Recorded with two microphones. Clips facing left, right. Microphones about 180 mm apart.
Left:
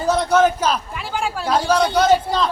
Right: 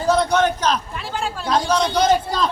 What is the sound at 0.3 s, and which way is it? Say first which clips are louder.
A man's voice: left 2 dB; 5° left (ahead or behind).